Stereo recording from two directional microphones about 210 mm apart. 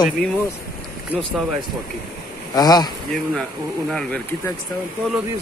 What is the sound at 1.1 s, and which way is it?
Speech, centre (ahead or behind).